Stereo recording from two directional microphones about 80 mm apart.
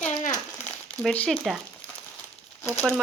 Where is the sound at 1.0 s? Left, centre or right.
Centre.